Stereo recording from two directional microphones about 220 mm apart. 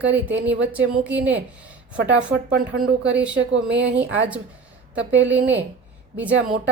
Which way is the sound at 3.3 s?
60° right (ahead or behind).